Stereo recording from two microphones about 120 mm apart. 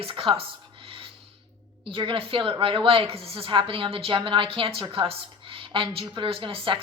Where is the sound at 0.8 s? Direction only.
45° right (ahead or behind).